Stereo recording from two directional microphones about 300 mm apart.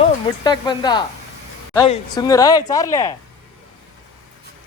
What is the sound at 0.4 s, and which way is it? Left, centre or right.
Speech, centre.